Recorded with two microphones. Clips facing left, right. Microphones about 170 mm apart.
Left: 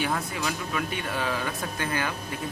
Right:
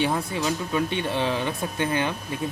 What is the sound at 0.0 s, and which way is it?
Speech, 25° right (ahead or behind).